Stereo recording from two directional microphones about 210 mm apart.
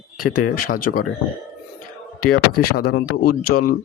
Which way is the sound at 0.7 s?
40° left (ahead or behind).